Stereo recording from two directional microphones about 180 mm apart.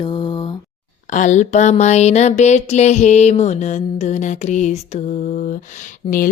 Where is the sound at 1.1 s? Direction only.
45° left (ahead or behind).